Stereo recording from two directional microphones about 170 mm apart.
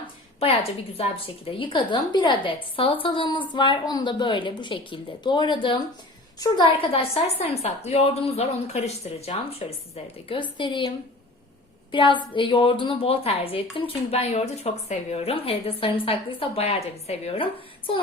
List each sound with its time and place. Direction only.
0.9 s a woman's voice: 35° left (ahead or behind)